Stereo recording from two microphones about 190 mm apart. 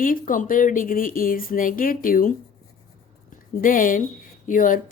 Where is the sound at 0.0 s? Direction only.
45° left (ahead or behind).